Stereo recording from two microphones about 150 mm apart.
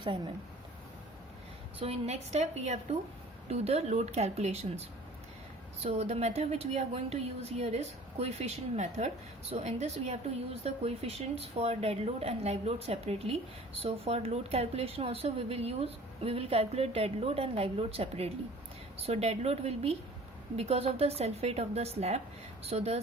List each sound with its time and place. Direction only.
1.8 s a woman's voice: 45° right (ahead or behind)
5.8 s a woman's voice: 45° right (ahead or behind)